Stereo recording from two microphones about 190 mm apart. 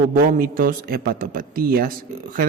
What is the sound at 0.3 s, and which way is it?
A man's voice, 45° right (ahead or behind).